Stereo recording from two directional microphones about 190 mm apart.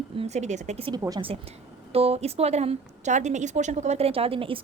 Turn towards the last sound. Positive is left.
turn(degrees=-30)  # may be behind; listen again after turning